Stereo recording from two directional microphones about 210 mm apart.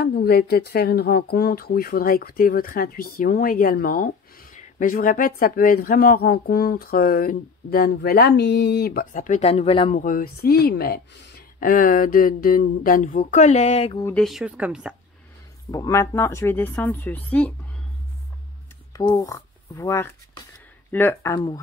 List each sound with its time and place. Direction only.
0.0 s speech: 50° left (ahead or behind); by 9.9 s 25° left (ahead or behind)
9.9 s speech: 45° left (ahead or behind); by 14.0 s 30° left (ahead or behind)
14.0 s speech: 5° left (ahead or behind)
15.7 s speech: 15° left (ahead or behind)
18.9 s speech: 20° left (ahead or behind)